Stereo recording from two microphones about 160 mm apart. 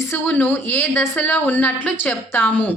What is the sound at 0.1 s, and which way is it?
Speech, 10° left (ahead or behind).